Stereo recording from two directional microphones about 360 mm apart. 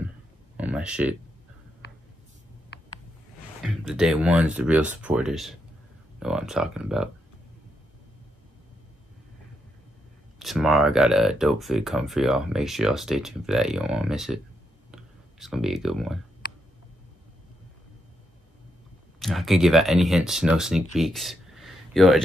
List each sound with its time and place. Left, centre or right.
0.6 s a sound: centre
2.7 s a sound: left
3.6 s speech: centre
10.4 s speech: centre
14.9 s clicking: centre
19.1 s speech: centre